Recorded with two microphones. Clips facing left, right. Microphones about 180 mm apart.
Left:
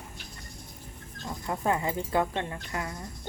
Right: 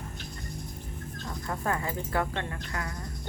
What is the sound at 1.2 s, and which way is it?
Speech, 15° left (ahead or behind).